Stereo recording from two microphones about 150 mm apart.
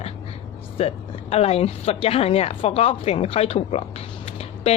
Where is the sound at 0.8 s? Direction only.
40° left (ahead or behind).